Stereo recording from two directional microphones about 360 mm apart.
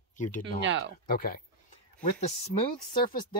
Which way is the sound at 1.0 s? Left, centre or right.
Left.